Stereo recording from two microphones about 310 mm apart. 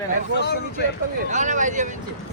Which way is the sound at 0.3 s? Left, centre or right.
Left.